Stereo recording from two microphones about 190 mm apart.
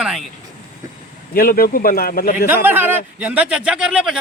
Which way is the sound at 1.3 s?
50° left (ahead or behind).